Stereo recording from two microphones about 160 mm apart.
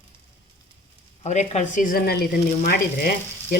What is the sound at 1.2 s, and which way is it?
Speech, 45° left (ahead or behind).